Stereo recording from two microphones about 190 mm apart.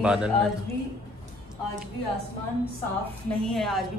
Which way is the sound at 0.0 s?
5° right (ahead or behind).